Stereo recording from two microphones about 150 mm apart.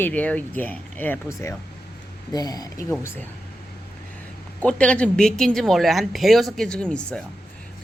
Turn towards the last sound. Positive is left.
turn(degrees=5)  # may be behind; listen again after turning